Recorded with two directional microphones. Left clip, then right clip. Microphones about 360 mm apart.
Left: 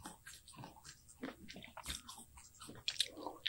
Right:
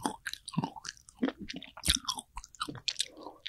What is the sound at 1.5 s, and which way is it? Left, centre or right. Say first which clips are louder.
Chewing: right 16 dB; right.